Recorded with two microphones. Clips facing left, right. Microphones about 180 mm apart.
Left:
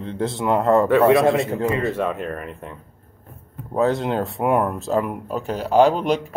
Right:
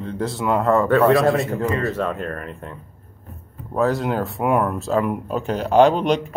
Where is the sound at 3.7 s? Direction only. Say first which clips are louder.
Even; 25° left (ahead or behind); by 5.9 s 10° left (ahead or behind).